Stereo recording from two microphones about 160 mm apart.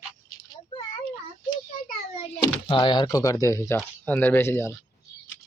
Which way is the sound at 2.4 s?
30° left (ahead or behind).